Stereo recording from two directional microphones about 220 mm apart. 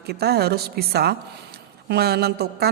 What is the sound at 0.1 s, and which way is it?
A woman's voice, 45° right (ahead or behind).